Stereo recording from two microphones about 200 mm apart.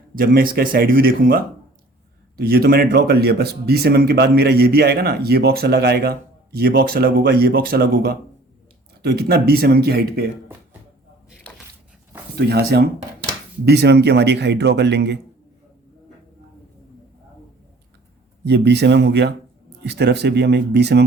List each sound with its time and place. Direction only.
0.2 s speech: 45° right (ahead or behind)
12.4 s speech: 55° right (ahead or behind)
18.4 s speech: 55° right (ahead or behind)